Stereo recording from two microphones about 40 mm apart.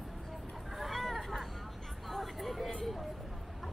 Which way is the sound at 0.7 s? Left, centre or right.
Centre.